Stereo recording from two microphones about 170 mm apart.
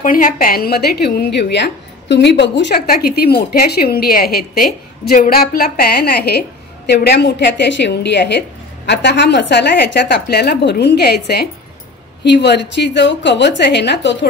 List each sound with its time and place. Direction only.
0.0 s a woman's voice: 55° left (ahead or behind); by 11.4 s 75° left (ahead or behind)
12.2 s a woman's voice: 85° left